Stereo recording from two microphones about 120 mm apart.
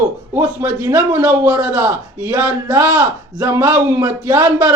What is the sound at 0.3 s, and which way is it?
A man's voice, 25° right (ahead or behind).